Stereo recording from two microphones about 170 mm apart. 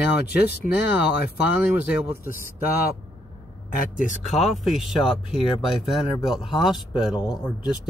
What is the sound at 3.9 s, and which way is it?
Speech, 45° left (ahead or behind).